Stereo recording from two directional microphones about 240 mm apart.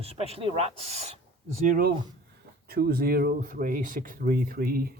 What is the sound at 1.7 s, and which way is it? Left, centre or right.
Speech, right.